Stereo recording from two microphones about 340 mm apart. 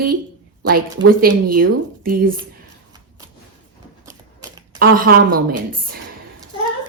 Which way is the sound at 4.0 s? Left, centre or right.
Centre.